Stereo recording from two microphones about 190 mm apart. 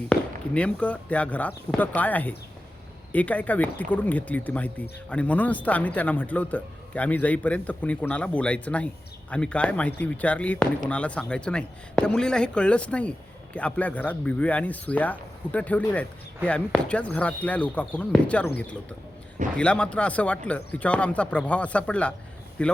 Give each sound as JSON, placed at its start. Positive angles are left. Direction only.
{"t": 0.1, "sound": "speech", "side_deg": 5}
{"t": 19.5, "sound": "speech", "side_deg": 5}